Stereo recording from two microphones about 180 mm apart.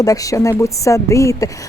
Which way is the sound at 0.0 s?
20° left (ahead or behind).